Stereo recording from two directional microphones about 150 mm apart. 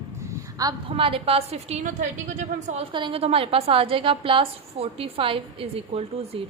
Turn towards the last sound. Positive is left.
turn(degrees=-40)  # may be behind; listen again after turning